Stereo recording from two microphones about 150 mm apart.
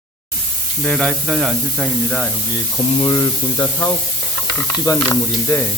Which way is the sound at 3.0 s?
25° left (ahead or behind).